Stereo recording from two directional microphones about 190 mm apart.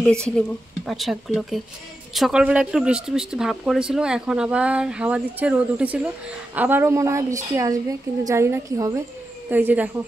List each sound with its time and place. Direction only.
0.4 s a woman's voice: centre (ahead or behind)